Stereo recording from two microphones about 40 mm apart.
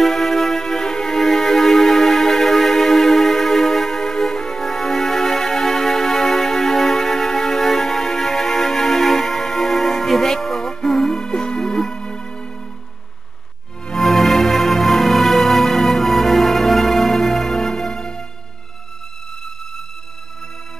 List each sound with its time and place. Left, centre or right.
0.0 s music: centre
13.9 s music: centre